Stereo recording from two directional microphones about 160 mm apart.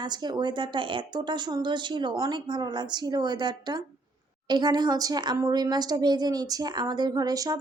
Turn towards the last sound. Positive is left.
turn(degrees=-20)  # may be behind; listen again after turning